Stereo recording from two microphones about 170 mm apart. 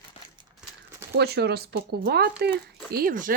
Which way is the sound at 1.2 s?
75° right (ahead or behind).